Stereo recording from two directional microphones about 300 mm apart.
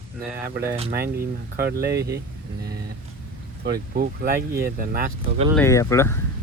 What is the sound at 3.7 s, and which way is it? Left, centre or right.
Speech, right.